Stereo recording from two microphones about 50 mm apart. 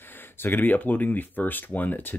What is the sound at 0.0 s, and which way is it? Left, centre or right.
Speech, left.